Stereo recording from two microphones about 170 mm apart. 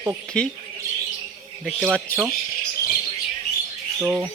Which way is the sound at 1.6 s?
Centre (ahead or behind).